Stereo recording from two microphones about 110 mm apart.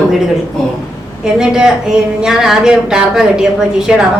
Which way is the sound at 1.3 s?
5° right (ahead or behind).